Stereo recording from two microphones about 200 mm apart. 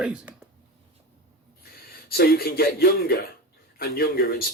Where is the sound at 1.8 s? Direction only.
50° left (ahead or behind).